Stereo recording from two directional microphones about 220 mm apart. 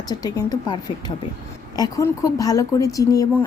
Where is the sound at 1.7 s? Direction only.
15° left (ahead or behind).